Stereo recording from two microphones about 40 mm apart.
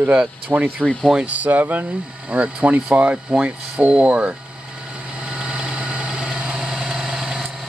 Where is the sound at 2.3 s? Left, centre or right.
Right.